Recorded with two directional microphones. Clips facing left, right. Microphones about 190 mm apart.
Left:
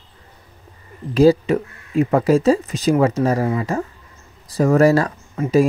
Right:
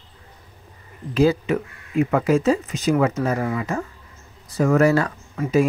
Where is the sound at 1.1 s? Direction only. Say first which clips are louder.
Left 5 dB; 35° left (ahead or behind).